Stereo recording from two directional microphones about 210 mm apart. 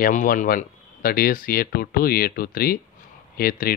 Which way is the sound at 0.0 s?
40° left (ahead or behind).